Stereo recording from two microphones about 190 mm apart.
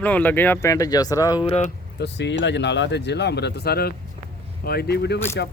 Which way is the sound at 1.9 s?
65° left (ahead or behind).